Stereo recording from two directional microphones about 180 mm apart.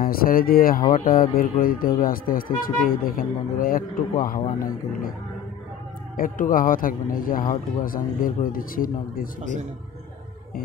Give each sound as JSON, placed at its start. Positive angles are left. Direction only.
{"t": 0.0, "sound": "speech", "side_deg": 55}
{"t": 6.1, "sound": "speech", "side_deg": 50}